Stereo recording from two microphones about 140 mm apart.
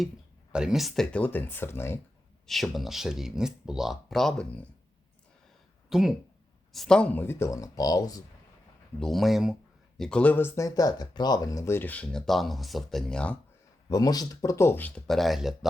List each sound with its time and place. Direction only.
0.5 s speech: 5° right (ahead or behind); by 2.0 s 15° left (ahead or behind)
2.5 s speech: centre (ahead or behind)
5.9 s speech: 5° right (ahead or behind); by 8.2 s 25° left (ahead or behind)
9.0 s speech: centre (ahead or behind)
10.0 s speech: 5° left (ahead or behind)
13.8 s speech: 25° left (ahead or behind); by 15.5 s centre (ahead or behind)